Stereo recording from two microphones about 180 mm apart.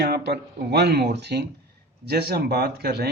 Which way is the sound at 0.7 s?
65° right (ahead or behind).